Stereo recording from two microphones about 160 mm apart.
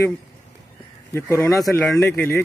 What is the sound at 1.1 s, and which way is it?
Speech, 20° left (ahead or behind).